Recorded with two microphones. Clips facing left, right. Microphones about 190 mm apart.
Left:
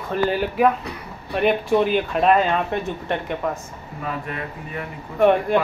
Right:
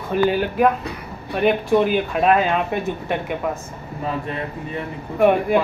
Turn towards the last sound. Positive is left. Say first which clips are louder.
# right 1 dB
turn(degrees=-5)  # may be behind; listen again after turning